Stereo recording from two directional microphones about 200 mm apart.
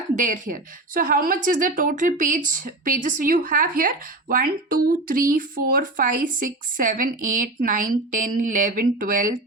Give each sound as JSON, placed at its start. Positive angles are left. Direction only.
{"t": 0.2, "sound": "a woman's voice", "side_deg": -40}